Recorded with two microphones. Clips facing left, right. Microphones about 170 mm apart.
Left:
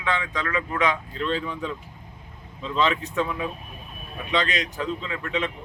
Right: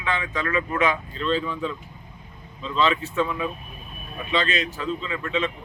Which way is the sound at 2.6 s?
15° left (ahead or behind).